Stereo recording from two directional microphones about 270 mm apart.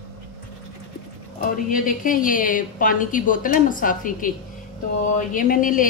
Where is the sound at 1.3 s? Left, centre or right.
Left.